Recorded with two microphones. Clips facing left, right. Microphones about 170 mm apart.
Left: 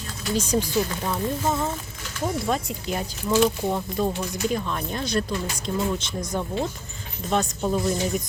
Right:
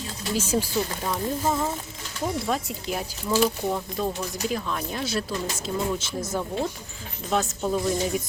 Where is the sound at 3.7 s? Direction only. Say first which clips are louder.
Left 2 dB; 10° left (ahead or behind).